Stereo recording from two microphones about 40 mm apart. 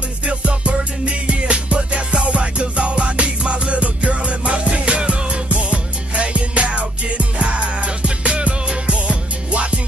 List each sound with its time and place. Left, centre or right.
0.2 s music: right